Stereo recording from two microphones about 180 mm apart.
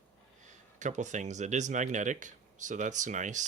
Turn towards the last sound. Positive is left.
turn(degrees=-45)  # may be behind; listen again after turning